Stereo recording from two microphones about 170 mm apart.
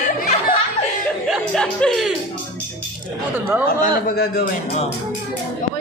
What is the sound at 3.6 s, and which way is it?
A man's voice, 60° left (ahead or behind).